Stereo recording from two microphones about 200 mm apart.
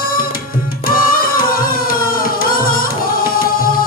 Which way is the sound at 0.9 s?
45° left (ahead or behind).